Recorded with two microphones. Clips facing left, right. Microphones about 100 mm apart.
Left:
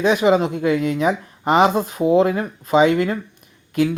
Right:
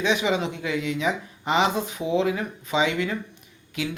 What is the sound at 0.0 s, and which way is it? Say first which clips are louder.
Speech: left 8 dB; 45° left (ahead or behind).